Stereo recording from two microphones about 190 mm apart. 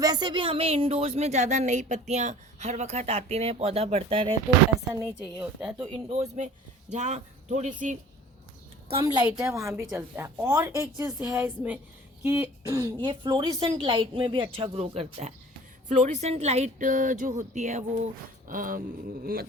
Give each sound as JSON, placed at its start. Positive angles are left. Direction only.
{"t": 0.0, "sound": "a woman's voice", "side_deg": -20}
{"t": 5.8, "sound": "a woman's voice", "side_deg": -30}
{"t": 8.9, "sound": "a woman's voice", "side_deg": -25}
{"t": 9.2, "sound": "a woman's voice", "side_deg": -10}
{"t": 18.4, "sound": "a sound", "side_deg": -45}